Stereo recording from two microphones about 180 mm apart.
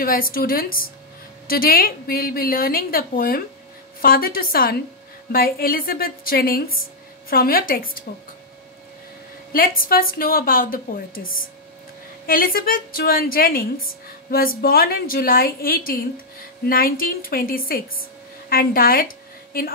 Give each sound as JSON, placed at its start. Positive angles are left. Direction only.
{"t": 0.0, "sound": "a woman's voice", "side_deg": 55}
{"t": 9.5, "sound": "a woman's voice", "side_deg": 50}
{"t": 12.3, "sound": "a woman's voice", "side_deg": 55}